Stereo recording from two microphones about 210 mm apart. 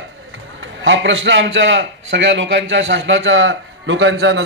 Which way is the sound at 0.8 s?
60° right (ahead or behind).